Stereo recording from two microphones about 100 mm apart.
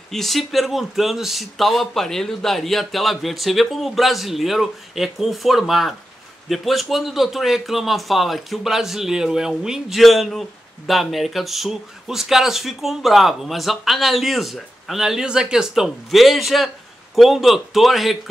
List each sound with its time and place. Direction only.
0.1 s speech: centre (ahead or behind)